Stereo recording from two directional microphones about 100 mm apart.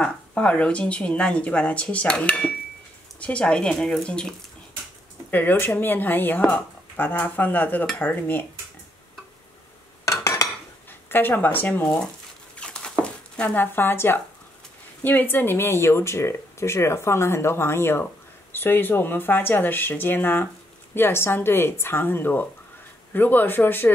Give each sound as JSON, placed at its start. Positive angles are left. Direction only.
{"t": 0.0, "sound": "speech", "side_deg": 10}
{"t": 5.3, "sound": "speech", "side_deg": 20}
{"t": 10.0, "sound": "stir", "side_deg": 35}
{"t": 10.9, "sound": "speech", "side_deg": 20}
{"t": 12.5, "sound": "dog", "side_deg": 10}
{"t": 13.0, "sound": "a sound", "side_deg": 10}
{"t": 13.7, "sound": "speech", "side_deg": 20}